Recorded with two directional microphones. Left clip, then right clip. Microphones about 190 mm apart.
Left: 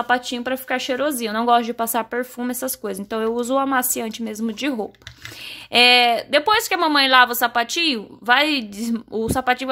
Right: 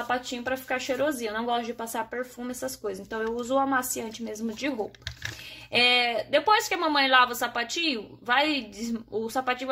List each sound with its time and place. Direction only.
0.1 s a woman's voice: 55° left (ahead or behind)